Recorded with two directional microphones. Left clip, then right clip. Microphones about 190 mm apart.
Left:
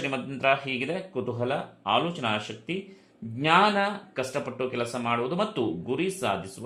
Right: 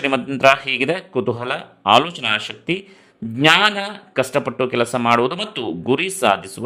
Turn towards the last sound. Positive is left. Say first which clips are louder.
# right 11 dB
turn(degrees=-45)  # may be behind; listen again after turning